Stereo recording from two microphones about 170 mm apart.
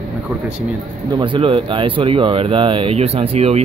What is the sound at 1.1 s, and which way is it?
Speech, 30° right (ahead or behind).